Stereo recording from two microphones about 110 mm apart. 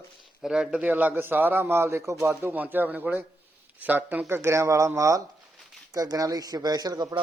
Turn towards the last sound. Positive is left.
turn(degrees=-35)  # may be behind; listen again after turning